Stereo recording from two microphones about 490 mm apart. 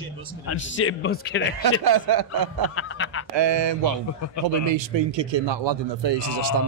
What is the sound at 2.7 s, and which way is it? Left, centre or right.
Snicker, left.